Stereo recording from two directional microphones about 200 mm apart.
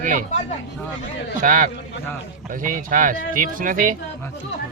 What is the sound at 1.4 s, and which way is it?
Speech, 40° right (ahead or behind).